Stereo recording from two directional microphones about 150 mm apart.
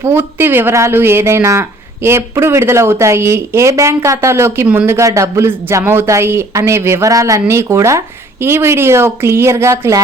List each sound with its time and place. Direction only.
0.0 s speech: 15° right (ahead or behind)